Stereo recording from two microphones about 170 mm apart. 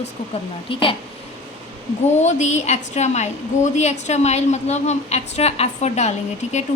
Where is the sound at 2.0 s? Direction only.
40° left (ahead or behind).